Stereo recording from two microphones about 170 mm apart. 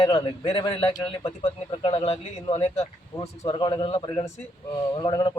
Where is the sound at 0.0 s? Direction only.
20° left (ahead or behind).